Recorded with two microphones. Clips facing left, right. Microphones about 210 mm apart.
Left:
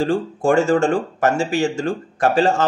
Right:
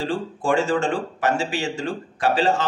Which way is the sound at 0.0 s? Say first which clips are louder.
Left 6 dB; 45° left (ahead or behind).